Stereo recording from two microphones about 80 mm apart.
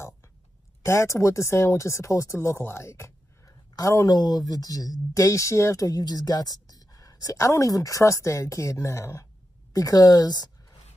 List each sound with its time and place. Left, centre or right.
0.8 s speech: left
4.1 s speech: left